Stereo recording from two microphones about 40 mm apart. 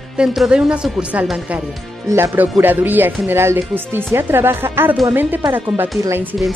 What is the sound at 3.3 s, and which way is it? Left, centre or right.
Speech, right.